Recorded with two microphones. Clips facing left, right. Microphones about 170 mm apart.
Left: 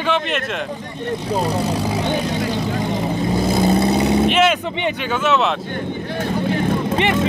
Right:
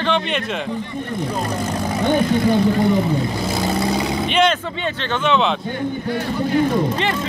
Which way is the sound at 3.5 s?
20° left (ahead or behind).